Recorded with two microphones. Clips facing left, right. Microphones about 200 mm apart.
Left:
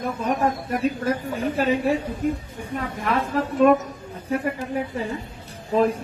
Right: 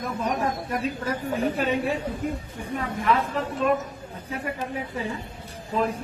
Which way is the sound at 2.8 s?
55° left (ahead or behind).